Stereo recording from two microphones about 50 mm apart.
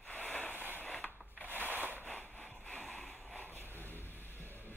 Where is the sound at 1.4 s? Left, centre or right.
Right.